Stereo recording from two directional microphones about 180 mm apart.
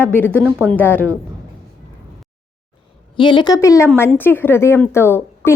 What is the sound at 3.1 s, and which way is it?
A woman's voice, 25° left (ahead or behind).